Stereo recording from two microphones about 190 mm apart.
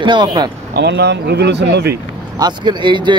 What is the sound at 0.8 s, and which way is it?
Speech, 60° right (ahead or behind).